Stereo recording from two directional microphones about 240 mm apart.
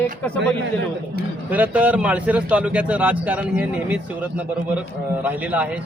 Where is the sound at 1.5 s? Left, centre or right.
Centre.